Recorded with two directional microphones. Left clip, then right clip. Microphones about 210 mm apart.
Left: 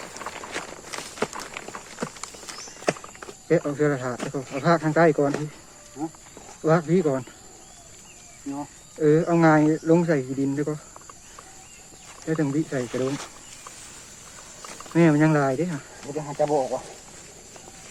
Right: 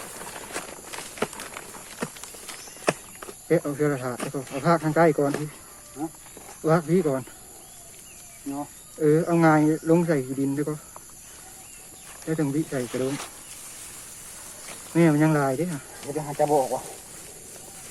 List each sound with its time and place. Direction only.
0.1 s clip-clop: centre (ahead or behind)
1.2 s a sound: centre (ahead or behind)
2.8 s snake: centre (ahead or behind)
4.6 s speech: 5° left (ahead or behind)
6.6 s speech: 5° left (ahead or behind)
8.5 s speech: 5° left (ahead or behind)
12.2 s speech: 5° left (ahead or behind)
14.9 s speech: 5° left (ahead or behind)
16.1 s speech: 30° right (ahead or behind)